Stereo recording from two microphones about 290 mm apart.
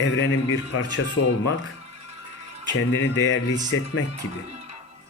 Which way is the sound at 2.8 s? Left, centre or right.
Left.